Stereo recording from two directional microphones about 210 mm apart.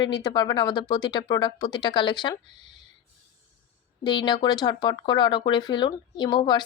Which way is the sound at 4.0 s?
20° left (ahead or behind).